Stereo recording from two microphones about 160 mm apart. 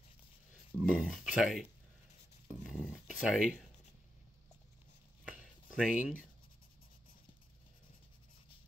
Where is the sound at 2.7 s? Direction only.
10° left (ahead or behind).